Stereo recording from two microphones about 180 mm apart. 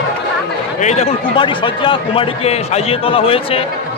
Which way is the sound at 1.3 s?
30° left (ahead or behind).